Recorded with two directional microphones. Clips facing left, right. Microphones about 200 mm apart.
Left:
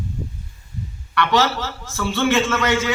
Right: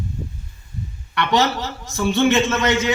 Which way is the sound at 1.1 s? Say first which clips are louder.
Even; 20° right (ahead or behind).